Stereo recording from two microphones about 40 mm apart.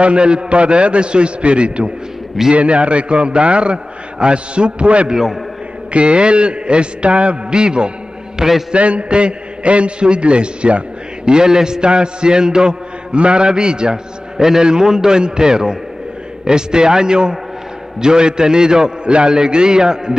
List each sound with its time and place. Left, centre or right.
0.0 s a man's voice: right
5.1 s a man's voice: centre
5.9 s a man's voice: right
8.4 s a man's voice: centre
8.7 s a man's voice: right; by 20.2 s centre